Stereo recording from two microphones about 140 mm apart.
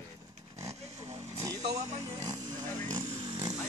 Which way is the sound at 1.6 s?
55° right (ahead or behind).